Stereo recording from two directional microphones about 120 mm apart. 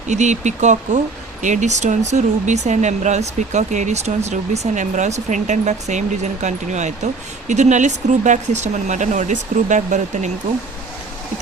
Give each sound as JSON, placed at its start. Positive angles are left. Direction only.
{"t": 0.1, "sound": "speech", "side_deg": -80}